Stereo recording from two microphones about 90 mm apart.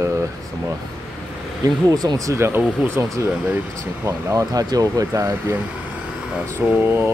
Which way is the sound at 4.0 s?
35° right (ahead or behind).